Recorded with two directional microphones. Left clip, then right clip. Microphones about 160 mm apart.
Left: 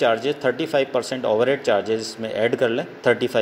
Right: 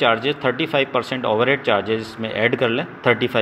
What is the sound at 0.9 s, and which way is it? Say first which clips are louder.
A man's voice: right 1 dB; 40° left (ahead or behind).